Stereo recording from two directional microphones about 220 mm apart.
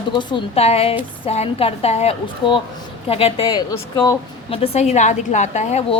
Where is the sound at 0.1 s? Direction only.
20° left (ahead or behind).